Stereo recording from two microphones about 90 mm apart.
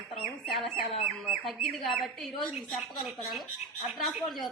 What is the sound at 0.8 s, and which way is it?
Speech, 90° left.